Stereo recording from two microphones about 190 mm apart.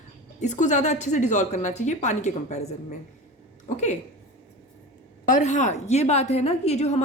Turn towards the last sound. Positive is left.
turn(degrees=35)  # may be behind; listen again after turning